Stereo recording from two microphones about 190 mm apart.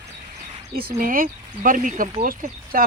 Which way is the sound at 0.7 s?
50° right (ahead or behind).